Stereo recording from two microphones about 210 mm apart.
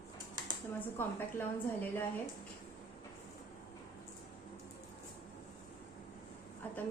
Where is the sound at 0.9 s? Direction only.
10° left (ahead or behind).